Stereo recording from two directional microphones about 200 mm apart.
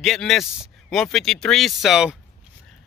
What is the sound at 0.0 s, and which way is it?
Speech, centre (ahead or behind).